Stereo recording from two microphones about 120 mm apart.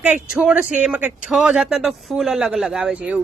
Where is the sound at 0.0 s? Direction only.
10° right (ahead or behind).